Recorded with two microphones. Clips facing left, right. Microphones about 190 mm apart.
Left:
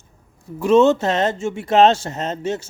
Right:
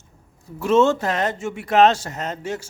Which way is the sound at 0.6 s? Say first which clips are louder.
Left 3 dB; 15° left (ahead or behind).